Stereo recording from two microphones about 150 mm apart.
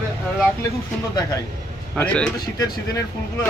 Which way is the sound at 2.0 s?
5° left (ahead or behind).